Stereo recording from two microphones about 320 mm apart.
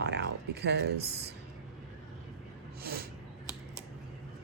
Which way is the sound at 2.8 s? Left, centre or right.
Right.